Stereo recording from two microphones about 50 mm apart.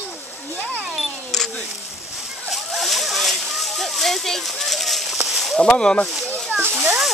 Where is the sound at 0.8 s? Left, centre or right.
Centre.